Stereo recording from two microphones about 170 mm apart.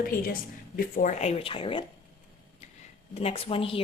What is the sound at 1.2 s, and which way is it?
Speech, 35° left (ahead or behind).